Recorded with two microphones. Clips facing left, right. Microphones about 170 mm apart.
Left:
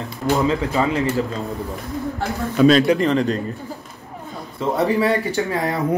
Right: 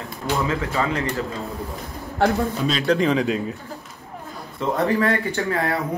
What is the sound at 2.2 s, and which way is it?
Speech, 70° right (ahead or behind).